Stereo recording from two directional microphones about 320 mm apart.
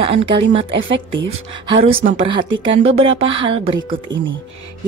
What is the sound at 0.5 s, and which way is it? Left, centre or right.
Speech, centre.